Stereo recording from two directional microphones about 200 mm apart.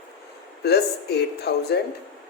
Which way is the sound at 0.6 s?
55° left (ahead or behind).